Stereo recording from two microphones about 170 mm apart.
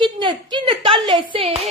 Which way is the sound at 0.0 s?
30° right (ahead or behind).